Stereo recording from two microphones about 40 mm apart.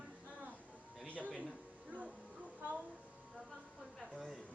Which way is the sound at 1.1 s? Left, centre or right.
Left.